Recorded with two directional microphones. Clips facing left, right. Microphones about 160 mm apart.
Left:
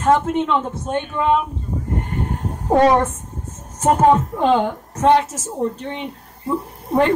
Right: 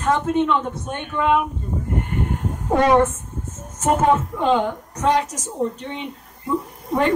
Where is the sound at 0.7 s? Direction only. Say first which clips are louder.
Left 4 dB; 30° left (ahead or behind).